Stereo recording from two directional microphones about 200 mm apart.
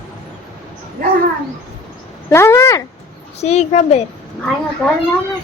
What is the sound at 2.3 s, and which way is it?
Speech, 15° left (ahead or behind).